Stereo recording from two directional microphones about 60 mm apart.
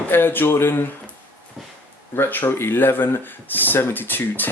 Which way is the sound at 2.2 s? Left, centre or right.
Left.